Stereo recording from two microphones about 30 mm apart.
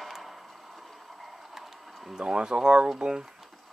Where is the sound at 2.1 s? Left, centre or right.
Right.